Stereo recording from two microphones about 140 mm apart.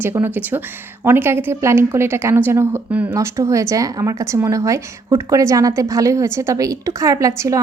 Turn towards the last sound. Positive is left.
turn(degrees=-25)  # may be behind; listen again after turning